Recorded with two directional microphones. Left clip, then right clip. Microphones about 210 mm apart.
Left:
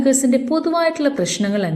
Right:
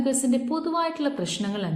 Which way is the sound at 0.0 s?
25° left (ahead or behind).